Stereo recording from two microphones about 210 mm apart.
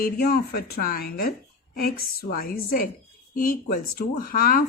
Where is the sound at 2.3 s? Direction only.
45° left (ahead or behind).